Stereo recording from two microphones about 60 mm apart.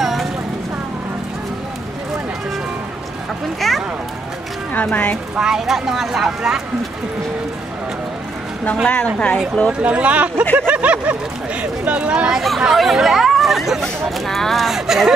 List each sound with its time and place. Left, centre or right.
0.0 s a sound: centre
3.6 s a sound: centre
4.8 s a woman's voice: centre
5.4 s speech: centre
8.8 s a woman's voice: centre
9.7 s speech: centre
10.7 s a sound: right
11.8 s speech: right
12.3 s speech: centre